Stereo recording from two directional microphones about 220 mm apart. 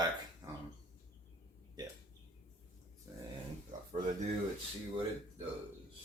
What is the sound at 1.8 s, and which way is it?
Speech, 20° right (ahead or behind).